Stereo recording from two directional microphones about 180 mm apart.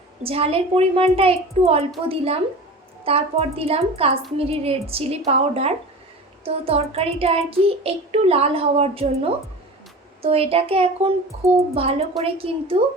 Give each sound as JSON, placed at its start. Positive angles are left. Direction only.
{"t": 0.2, "sound": "child singing", "side_deg": -30}
{"t": 10.2, "sound": "child singing", "side_deg": -35}